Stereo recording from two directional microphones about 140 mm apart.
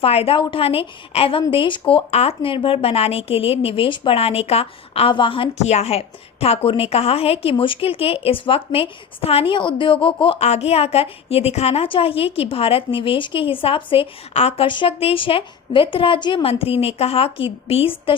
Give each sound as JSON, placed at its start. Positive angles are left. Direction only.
{"t": 0.0, "sound": "a woman's voice", "side_deg": 45}
{"t": 2.0, "sound": "a woman's voice", "side_deg": 50}